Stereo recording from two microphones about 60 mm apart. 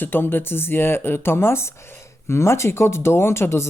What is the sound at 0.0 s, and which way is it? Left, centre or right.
Speech, left.